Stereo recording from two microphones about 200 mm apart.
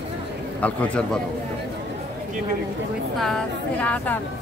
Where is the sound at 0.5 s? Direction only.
5° left (ahead or behind).